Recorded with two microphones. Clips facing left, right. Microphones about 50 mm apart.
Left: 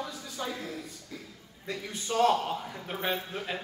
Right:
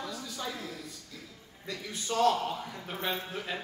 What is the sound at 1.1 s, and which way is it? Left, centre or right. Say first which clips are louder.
A man's voice: left 3 dB; left.